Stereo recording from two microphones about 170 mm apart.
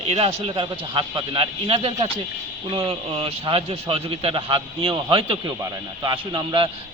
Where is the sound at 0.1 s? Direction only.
35° right (ahead or behind).